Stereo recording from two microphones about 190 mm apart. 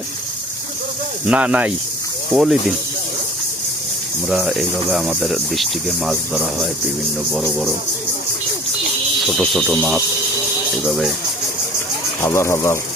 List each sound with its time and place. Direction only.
1.2 s speech: 5° right (ahead or behind)
4.3 s speech: centre (ahead or behind)
9.2 s speech: centre (ahead or behind)
12.2 s speech: 15° left (ahead or behind)